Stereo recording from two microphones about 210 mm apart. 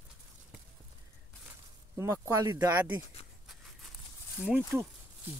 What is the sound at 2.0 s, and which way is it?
Speech, 15° right (ahead or behind).